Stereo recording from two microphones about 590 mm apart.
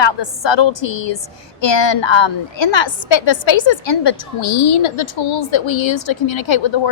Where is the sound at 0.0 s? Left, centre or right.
Left.